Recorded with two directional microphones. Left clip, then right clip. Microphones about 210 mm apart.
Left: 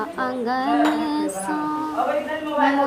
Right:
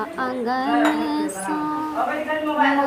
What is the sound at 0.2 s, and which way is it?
Child singing, centre (ahead or behind).